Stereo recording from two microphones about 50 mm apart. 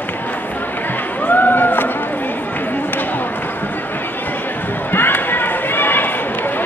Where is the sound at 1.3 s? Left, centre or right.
Left.